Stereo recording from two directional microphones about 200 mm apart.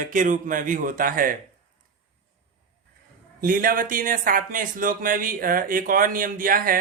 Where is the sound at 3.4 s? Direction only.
45° right (ahead or behind).